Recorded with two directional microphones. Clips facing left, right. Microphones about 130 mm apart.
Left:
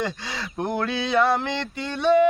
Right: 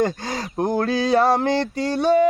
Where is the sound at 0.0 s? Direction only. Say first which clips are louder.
Right 7 dB; 45° right (ahead or behind).